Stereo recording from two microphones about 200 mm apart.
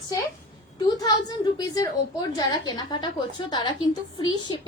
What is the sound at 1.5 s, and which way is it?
A woman's voice, 20° left (ahead or behind).